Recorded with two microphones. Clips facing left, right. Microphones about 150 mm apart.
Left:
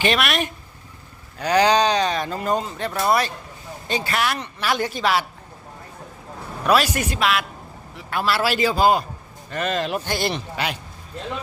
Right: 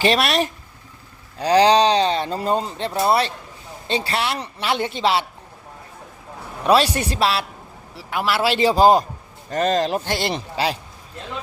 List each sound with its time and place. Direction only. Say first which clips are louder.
0.0 s speech: right 3 dB; 35° right (ahead or behind)
6.7 s speech: right 2 dB; 30° right (ahead or behind)
8.1 s speech: right 1 dB; 20° right (ahead or behind)
8.5 s speech: right 5 dB; 35° right (ahead or behind)